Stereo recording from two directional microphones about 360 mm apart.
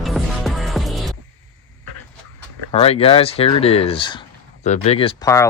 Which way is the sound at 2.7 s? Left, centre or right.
Centre.